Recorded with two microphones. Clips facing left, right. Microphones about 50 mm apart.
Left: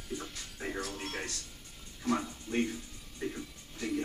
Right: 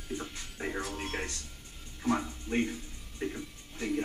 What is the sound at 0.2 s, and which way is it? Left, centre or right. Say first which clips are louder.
Music: right 3 dB; centre.